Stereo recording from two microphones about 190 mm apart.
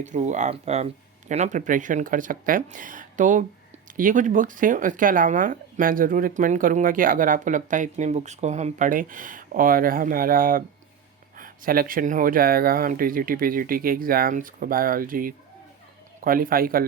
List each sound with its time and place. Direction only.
0.0 s speech: 40° right (ahead or behind)